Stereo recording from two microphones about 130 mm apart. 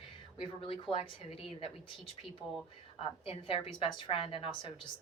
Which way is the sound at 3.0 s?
45° left (ahead or behind).